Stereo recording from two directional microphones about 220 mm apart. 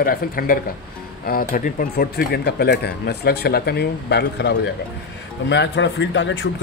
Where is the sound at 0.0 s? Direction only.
40° left (ahead or behind).